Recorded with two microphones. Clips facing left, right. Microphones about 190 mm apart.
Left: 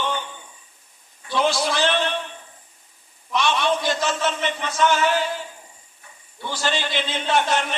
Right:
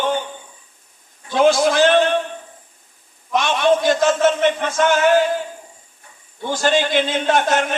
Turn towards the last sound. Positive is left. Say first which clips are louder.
# right 4 dB
turn(degrees=-45)  # may be behind; listen again after turning